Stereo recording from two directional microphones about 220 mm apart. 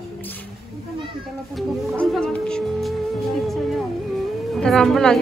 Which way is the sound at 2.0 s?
5° left (ahead or behind).